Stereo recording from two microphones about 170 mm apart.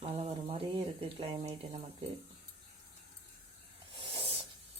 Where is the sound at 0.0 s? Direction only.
35° right (ahead or behind).